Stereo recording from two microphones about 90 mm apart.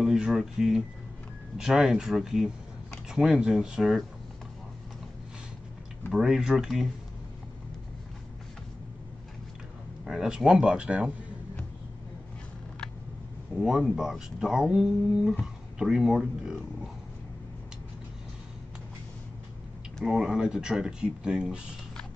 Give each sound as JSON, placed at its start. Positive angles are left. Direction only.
{"t": 0.0, "sound": "speech", "side_deg": -5}
{"t": 6.1, "sound": "speech", "side_deg": -5}
{"t": 10.0, "sound": "speech", "side_deg": -5}
{"t": 13.6, "sound": "speech", "side_deg": -5}
{"t": 20.1, "sound": "speech", "side_deg": -5}